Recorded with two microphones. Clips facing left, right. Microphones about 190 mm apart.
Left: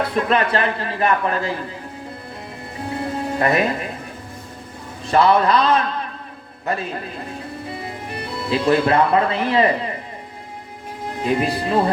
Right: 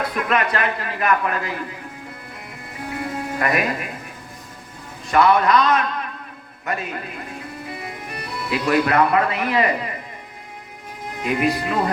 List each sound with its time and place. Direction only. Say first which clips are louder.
0.0 s a man's voice: left 3 dB; 30° left (ahead or behind)
2.8 s music: left 3 dB; 30° left (ahead or behind)
5.0 s a man's voice: left 1 dB; 30° left (ahead or behind)
11.0 s speech: left 1 dB; 30° left (ahead or behind)